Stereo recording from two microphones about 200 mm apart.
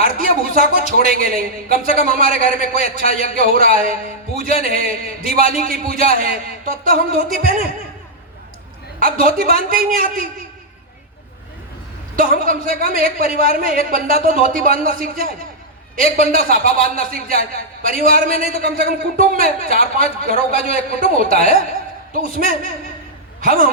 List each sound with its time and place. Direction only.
0.0 s a sound: 45° right (ahead or behind)
0.7 s a man's voice: 45° right (ahead or behind)
9.0 s a man's voice: 45° right (ahead or behind)
12.1 s a man's voice: 45° right (ahead or behind)